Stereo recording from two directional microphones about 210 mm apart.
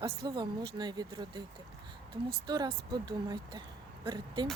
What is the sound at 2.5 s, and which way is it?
Speech, 20° right (ahead or behind).